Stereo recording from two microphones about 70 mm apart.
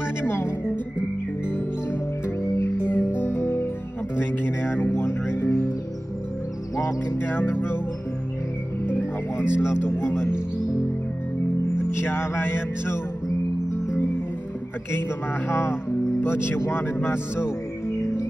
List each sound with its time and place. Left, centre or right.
0.2 s music: left
2.8 s music: left
4.2 s a sound: left
5.4 s music: left
6.8 s music: left
9.5 s speech: left
11.7 s music: left
14.9 s speech: left